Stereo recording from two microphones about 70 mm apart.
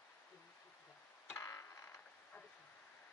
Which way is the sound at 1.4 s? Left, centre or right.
Left.